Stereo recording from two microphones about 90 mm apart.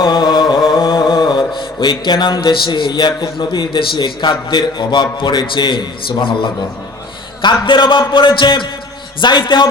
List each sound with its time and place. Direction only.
0.0 s music: 50° left (ahead or behind)
1.1 s mantra: 55° left (ahead or behind)
2.7 s a man's voice: 55° left (ahead or behind)
5.7 s a man's voice: 70° left (ahead or behind)